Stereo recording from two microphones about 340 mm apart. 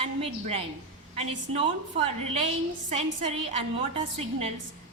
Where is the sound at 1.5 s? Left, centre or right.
Centre.